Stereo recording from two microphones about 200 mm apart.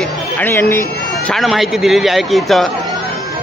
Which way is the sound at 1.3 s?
Centre (ahead or behind).